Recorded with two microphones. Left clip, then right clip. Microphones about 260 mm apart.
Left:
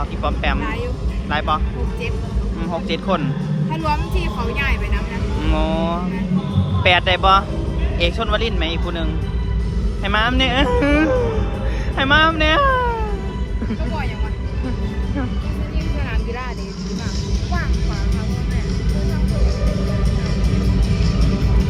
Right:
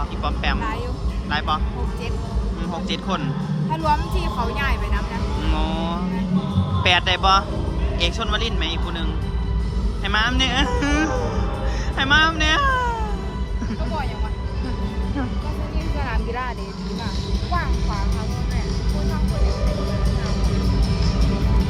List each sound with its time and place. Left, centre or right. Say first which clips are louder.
0.2 s vehicle: left 3 dB; centre
1.3 s speech: left 3 dB; centre
2.7 s speech: left 5 dB; centre
19.0 s music: even; right